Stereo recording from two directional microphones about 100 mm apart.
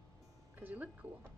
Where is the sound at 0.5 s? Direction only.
15° right (ahead or behind).